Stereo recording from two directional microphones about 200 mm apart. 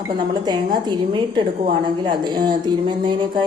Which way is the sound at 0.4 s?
20° right (ahead or behind).